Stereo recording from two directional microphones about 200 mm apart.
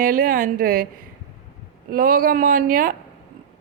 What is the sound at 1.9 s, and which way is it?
A woman's voice, 45° right (ahead or behind).